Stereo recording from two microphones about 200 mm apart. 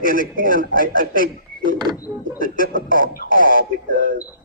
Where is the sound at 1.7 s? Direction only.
20° right (ahead or behind).